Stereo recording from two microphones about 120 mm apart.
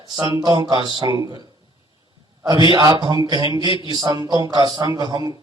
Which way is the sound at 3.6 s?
45° left (ahead or behind).